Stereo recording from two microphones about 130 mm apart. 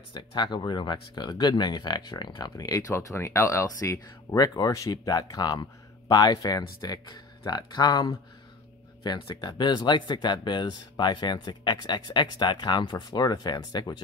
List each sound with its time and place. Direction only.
0.1 s speech: 35° left (ahead or behind)